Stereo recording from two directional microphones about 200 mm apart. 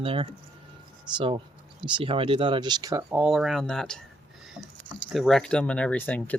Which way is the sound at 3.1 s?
5° right (ahead or behind).